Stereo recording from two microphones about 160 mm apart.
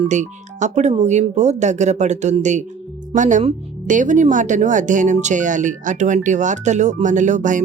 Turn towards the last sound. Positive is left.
turn(degrees=-50)  # may be behind; listen again after turning